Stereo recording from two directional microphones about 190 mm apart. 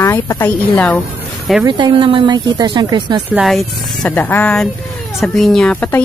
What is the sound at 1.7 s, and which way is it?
Speech, 25° right (ahead or behind).